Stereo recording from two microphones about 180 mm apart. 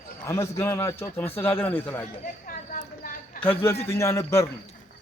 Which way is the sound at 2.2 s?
50° left (ahead or behind).